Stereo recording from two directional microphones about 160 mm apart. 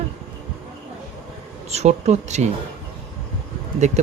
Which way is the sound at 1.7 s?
45° right (ahead or behind).